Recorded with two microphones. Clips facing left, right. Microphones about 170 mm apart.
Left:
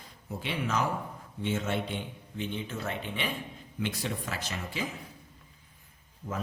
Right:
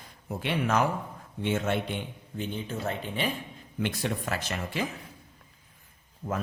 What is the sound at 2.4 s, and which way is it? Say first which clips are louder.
Speech: right 2 dB; 35° right (ahead or behind).